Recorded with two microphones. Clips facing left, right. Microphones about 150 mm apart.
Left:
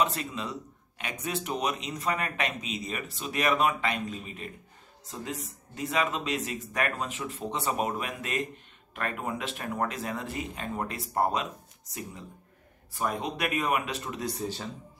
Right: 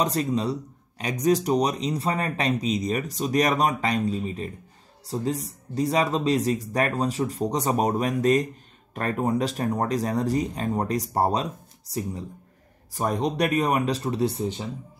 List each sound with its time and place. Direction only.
0.0 s speech: 40° right (ahead or behind)
14.4 s speech: 15° right (ahead or behind)